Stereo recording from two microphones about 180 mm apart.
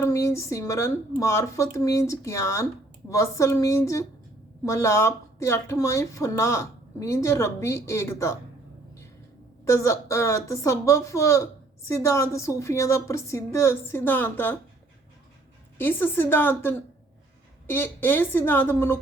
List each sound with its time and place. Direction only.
0.0 s speech: 15° left (ahead or behind)
9.6 s speech: 15° left (ahead or behind)
15.8 s speech: 10° left (ahead or behind)